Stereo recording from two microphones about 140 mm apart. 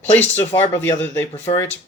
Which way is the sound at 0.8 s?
15° left (ahead or behind).